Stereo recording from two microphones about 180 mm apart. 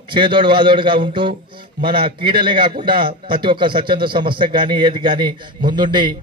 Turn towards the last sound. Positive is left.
turn(degrees=-25)  # may be behind; listen again after turning